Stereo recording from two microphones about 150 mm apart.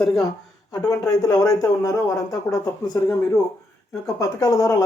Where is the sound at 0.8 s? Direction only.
25° left (ahead or behind).